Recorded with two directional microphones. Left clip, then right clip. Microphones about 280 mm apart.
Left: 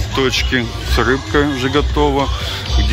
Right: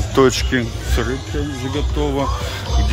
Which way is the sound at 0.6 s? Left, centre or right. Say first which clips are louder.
Left 5 dB; centre.